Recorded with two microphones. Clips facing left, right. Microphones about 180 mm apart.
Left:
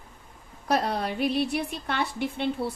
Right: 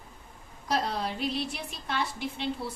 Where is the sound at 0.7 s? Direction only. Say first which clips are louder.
Left 4 dB; 60° left (ahead or behind).